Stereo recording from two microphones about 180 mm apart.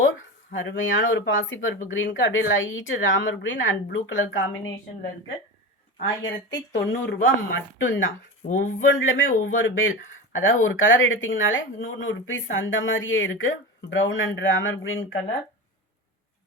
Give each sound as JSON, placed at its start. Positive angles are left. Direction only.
{"t": 0.0, "sound": "speech", "side_deg": 90}
{"t": 6.0, "sound": "speech", "side_deg": 80}
{"t": 7.8, "sound": "speech", "side_deg": 90}
{"t": 8.4, "sound": "speech", "side_deg": 45}
{"t": 8.8, "sound": "speech", "side_deg": 90}